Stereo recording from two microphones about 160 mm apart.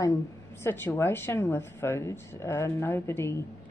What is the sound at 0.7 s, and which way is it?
A woman's voice, 15° left (ahead or behind).